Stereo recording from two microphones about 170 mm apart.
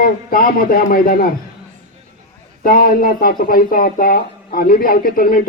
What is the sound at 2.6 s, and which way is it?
Speech, 55° left (ahead or behind).